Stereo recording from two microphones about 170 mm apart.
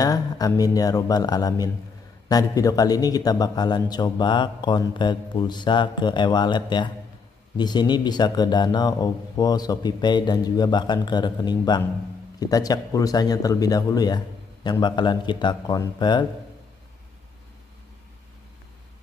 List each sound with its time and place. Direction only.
0.0 s a man's voice: 20° left (ahead or behind)